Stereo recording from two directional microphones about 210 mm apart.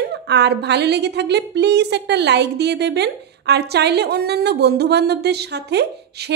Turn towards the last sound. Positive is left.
turn(degrees=-50)  # may be behind; listen again after turning